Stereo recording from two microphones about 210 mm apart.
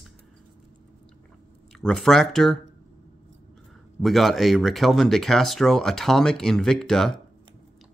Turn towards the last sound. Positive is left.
turn(degrees=0)  # may be behind; listen again after turning